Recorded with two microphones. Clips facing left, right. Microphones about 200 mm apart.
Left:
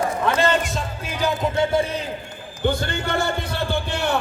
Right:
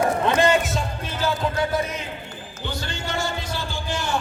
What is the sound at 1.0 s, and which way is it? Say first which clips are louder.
Music: left 3 dB; 15° left (ahead or behind).